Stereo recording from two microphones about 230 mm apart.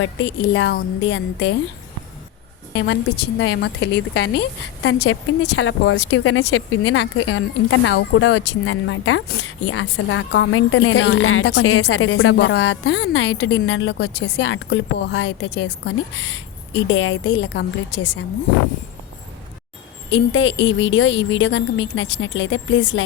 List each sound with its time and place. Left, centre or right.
0.0 s a woman's voice: left
2.7 s a woman's voice: left
20.1 s a woman's voice: left